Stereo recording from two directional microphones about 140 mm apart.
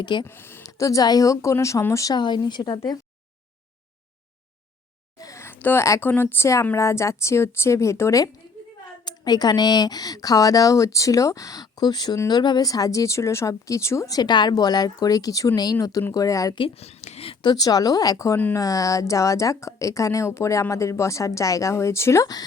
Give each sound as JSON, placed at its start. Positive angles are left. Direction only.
{"t": 0.0, "sound": "speech", "side_deg": 35}
{"t": 0.3, "sound": "speech", "side_deg": 15}
{"t": 5.1, "sound": "speech", "side_deg": 25}
{"t": 16.6, "sound": "speech", "side_deg": 45}
{"t": 17.5, "sound": "speech", "side_deg": 30}